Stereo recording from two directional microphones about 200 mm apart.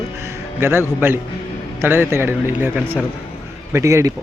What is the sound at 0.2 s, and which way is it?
A man's voice, 15° right (ahead or behind).